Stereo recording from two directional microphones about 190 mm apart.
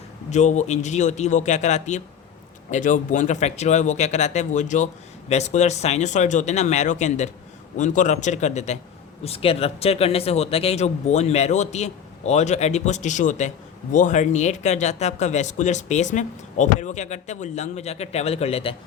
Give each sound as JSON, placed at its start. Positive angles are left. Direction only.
{"t": 0.3, "sound": "speech", "side_deg": 40}